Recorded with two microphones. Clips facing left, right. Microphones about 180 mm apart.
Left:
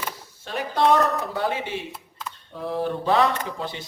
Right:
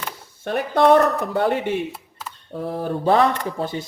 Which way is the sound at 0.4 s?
55° right (ahead or behind).